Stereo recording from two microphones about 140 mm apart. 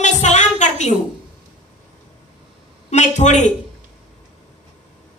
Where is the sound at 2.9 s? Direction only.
55° left (ahead or behind).